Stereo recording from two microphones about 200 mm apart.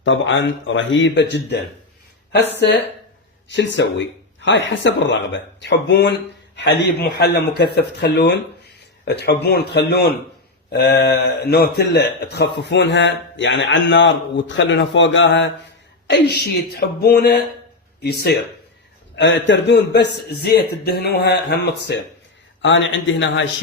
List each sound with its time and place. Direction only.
0.0 s a man's voice: 70° left (ahead or behind)
3.5 s a man's voice: 60° left (ahead or behind)
16.0 s a woman's voice: 55° left (ahead or behind)
19.1 s a man's voice: 65° left (ahead or behind)
22.6 s speech: 70° left (ahead or behind)